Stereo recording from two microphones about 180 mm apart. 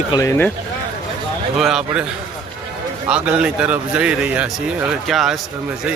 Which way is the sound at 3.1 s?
5° right (ahead or behind).